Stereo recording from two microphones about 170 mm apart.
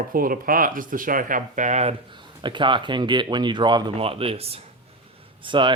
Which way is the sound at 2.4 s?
30° right (ahead or behind).